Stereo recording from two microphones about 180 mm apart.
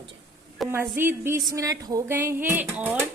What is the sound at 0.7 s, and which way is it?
A woman's voice, 15° right (ahead or behind).